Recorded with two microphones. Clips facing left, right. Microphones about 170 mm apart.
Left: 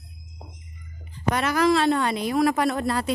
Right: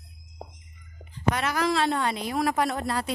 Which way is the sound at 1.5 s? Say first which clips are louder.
Left 8 dB; 70° left (ahead or behind).